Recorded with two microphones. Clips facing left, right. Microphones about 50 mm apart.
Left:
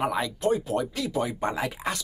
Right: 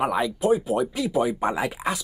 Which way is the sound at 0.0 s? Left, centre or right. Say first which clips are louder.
Right 3 dB; centre.